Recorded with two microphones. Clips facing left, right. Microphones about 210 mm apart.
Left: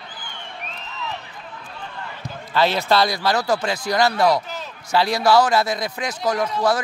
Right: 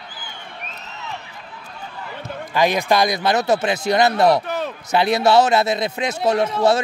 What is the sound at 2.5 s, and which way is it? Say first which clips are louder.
Speech: right 1 dB; 15° right (ahead or behind).